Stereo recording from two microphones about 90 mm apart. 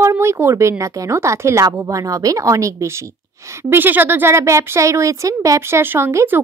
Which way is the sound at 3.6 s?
25° right (ahead or behind).